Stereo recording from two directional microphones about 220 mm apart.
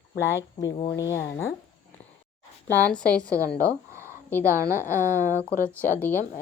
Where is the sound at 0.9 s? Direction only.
15° left (ahead or behind).